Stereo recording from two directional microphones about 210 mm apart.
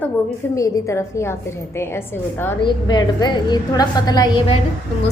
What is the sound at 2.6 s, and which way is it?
A woman's voice, 20° left (ahead or behind).